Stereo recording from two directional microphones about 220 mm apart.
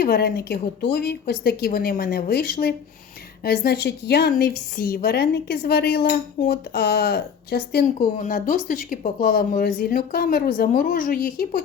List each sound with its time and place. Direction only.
0.0 s a woman's voice: 45° left (ahead or behind)